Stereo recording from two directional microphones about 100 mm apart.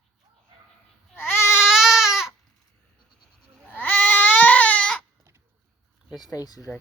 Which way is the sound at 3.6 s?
15° left (ahead or behind).